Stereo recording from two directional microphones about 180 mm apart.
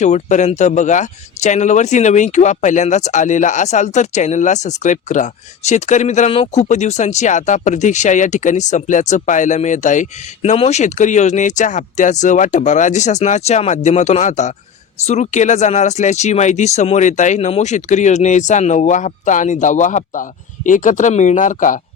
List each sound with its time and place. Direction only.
0.0 s speech: 40° left (ahead or behind)